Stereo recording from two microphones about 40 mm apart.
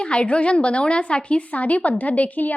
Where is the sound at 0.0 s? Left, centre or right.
Left.